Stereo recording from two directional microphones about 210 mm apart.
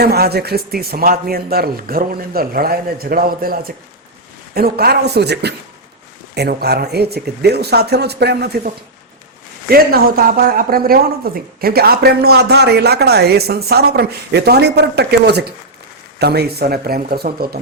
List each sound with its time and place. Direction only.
0.0 s speech: 50° right (ahead or behind)